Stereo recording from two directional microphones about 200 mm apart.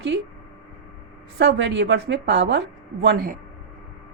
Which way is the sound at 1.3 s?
60° right (ahead or behind).